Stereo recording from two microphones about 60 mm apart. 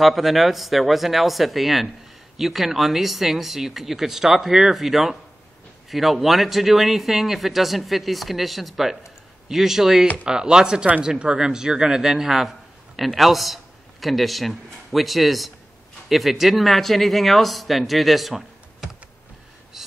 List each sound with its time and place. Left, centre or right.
0.0 s a man's voice: centre